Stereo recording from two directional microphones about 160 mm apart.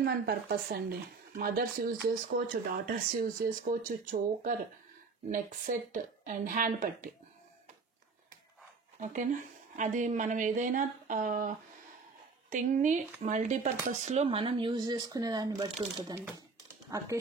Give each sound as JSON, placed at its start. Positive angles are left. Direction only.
{"t": 0.0, "sound": "speech", "side_deg": -70}
{"t": 9.0, "sound": "a woman's voice", "side_deg": -55}